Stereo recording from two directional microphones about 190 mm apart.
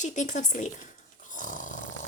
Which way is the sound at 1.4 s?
45° left (ahead or behind).